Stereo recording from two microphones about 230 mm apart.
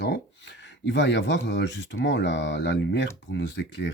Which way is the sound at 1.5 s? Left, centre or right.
Left.